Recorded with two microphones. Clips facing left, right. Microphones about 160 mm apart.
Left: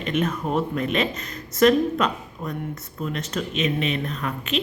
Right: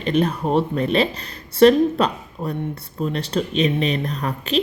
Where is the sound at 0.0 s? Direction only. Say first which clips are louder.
Right 4 dB; 35° right (ahead or behind).